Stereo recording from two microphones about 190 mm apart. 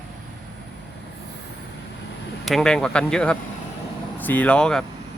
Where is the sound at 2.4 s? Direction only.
Centre (ahead or behind).